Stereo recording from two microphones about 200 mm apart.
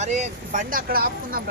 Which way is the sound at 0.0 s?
35° right (ahead or behind).